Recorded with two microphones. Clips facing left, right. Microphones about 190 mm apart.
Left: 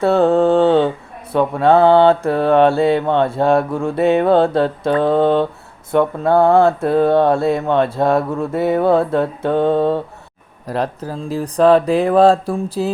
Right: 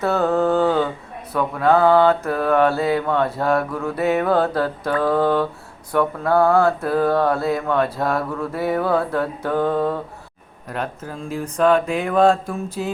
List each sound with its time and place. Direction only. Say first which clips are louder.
0.0 s mantra: left 6 dB; 30° left (ahead or behind)
10.7 s speech: left 6 dB; 35° left (ahead or behind)